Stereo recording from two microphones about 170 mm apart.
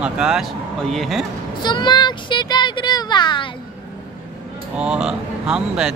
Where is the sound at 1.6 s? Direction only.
25° left (ahead or behind).